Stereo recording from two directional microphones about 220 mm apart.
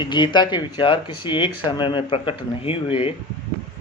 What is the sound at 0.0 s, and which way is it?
Speech, 20° left (ahead or behind).